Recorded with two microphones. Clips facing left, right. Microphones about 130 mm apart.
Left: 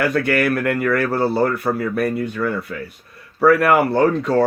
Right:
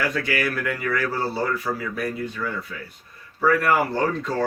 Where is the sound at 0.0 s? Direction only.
60° left (ahead or behind).